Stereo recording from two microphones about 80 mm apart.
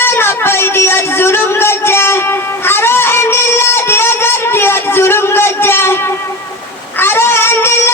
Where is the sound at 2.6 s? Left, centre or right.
Left.